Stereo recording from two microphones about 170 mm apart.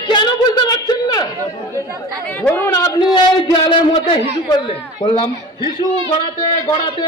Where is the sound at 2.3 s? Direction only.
10° left (ahead or behind); by 5.2 s 30° left (ahead or behind).